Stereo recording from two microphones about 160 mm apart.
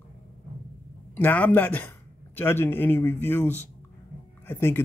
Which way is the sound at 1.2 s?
10° left (ahead or behind).